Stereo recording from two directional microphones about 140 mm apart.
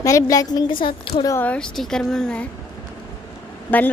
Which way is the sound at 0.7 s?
85° left.